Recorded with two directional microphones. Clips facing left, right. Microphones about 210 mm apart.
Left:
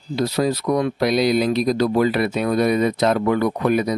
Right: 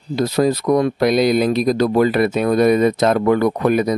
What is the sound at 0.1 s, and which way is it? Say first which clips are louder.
Speech: right 4 dB; 50° right (ahead or behind).